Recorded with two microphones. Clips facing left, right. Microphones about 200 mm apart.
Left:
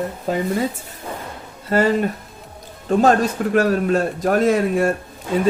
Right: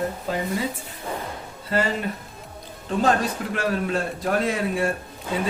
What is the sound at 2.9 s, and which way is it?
Speech, 45° left (ahead or behind).